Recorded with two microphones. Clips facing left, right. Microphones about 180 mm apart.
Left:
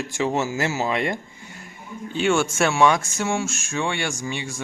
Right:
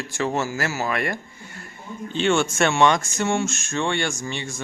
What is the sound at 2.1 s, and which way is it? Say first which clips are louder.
Speech: even; 5° left (ahead or behind).